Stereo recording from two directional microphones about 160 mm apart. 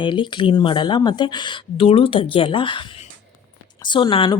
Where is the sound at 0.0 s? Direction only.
30° left (ahead or behind).